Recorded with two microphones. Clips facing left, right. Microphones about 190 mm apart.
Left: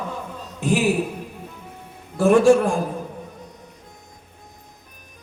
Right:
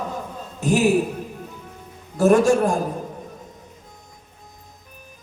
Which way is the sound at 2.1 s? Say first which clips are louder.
Left 1 dB; 40° right (ahead or behind).